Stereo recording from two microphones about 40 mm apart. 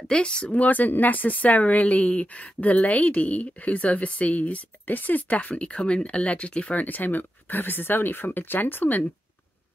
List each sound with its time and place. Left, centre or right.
0.1 s speech: left
0.5 s speech: left
6.8 s speech: left